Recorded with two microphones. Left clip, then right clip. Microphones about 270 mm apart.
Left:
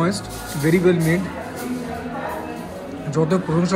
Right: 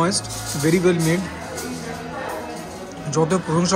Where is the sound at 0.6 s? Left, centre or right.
Right.